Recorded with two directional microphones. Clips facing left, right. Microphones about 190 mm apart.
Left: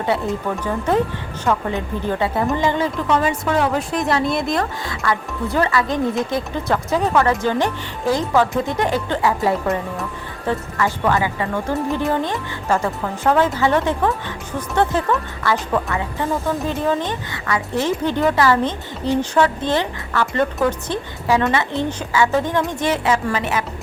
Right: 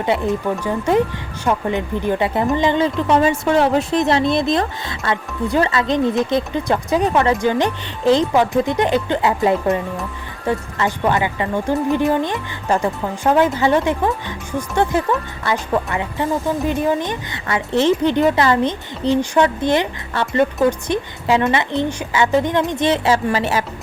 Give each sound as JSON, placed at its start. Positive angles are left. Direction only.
{"t": 0.0, "sound": "speech", "side_deg": -15}
{"t": 15.7, "sound": "speech", "side_deg": -20}
{"t": 17.4, "sound": "speech", "side_deg": -25}